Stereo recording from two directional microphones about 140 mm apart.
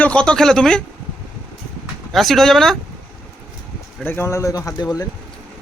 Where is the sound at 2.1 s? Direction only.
Centre (ahead or behind).